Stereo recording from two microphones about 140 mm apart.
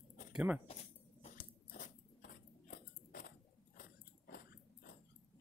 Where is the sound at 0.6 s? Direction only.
50° left (ahead or behind); by 3.3 s 90° left.